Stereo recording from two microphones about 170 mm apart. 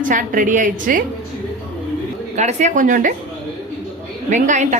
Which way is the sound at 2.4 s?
45° right (ahead or behind).